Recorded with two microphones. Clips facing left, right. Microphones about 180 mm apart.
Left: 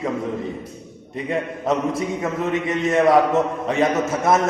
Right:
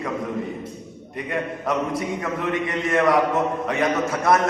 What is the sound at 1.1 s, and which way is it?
A man's voice, 25° left (ahead or behind).